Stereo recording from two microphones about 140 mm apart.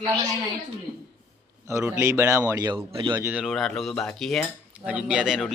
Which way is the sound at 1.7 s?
20° right (ahead or behind).